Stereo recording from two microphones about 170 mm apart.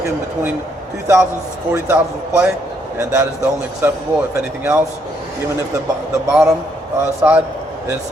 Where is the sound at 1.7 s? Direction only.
15° right (ahead or behind).